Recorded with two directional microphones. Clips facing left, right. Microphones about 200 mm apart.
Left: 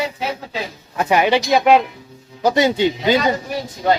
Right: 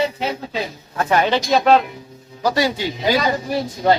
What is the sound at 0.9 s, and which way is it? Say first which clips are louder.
Speech: left 2 dB; 15° left (ahead or behind).